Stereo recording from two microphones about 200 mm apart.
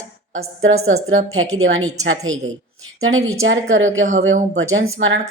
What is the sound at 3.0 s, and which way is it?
A woman's voice, 90° right.